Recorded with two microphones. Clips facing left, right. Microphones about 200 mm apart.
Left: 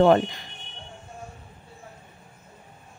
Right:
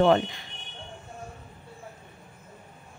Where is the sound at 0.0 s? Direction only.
45° left (ahead or behind).